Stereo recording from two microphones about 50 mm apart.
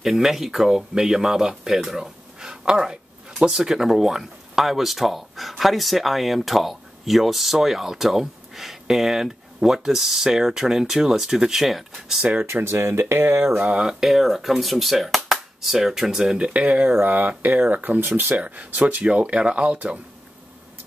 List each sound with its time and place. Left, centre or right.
0.0 s speech: centre
12.6 s speech: right
13.7 s speech: centre
14.0 s speech: centre
16.5 s speech: right
18.4 s speech: right
19.0 s speech: right